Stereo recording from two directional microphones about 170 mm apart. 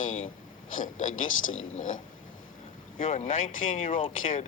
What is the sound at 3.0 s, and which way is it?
Speech, 45° left (ahead or behind).